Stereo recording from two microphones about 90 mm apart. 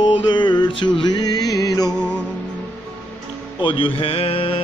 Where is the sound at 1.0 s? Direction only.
50° left (ahead or behind).